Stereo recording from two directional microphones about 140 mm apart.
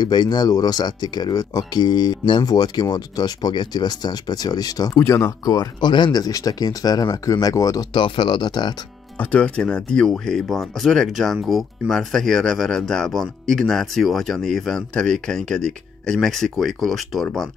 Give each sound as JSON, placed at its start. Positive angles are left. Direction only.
{"t": 0.0, "sound": "speech", "side_deg": 30}
{"t": 9.2, "sound": "speech", "side_deg": 10}